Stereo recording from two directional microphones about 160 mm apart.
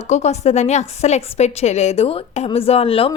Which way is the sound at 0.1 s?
45° left (ahead or behind).